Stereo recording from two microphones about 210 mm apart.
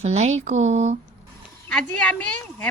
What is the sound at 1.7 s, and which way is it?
A woman's voice, 5° left (ahead or behind).